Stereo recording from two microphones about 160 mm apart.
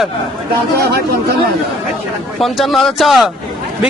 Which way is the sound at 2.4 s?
Centre (ahead or behind).